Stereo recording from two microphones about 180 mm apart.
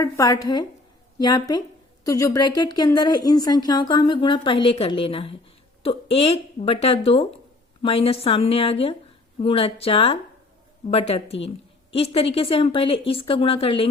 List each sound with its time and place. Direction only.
0.0 s a woman's voice: 20° left (ahead or behind)